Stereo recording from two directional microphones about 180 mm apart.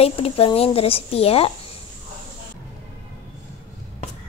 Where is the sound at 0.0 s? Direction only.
35° left (ahead or behind).